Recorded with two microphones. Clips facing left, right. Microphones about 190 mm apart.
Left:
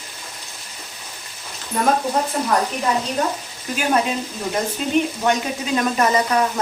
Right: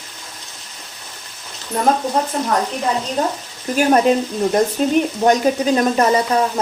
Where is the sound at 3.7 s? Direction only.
45° right (ahead or behind).